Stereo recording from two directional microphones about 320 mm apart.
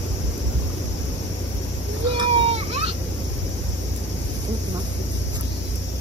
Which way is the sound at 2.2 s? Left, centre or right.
Centre.